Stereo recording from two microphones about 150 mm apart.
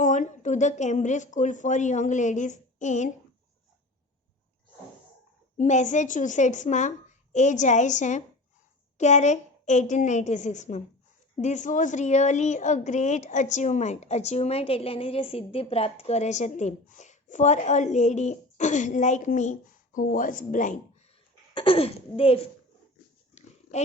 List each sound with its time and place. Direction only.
0.0 s a woman's voice: 55° left (ahead or behind)
5.5 s a woman's voice: 55° left (ahead or behind)
21.5 s speech: 35° left (ahead or behind)